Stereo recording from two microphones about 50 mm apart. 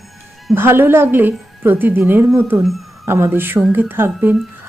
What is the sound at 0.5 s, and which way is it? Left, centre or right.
A woman's voice, right.